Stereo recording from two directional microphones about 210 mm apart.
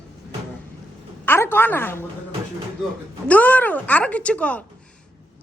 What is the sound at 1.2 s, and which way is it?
Speech, 10° left (ahead or behind).